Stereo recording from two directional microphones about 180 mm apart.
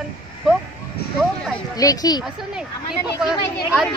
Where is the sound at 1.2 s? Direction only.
Centre (ahead or behind).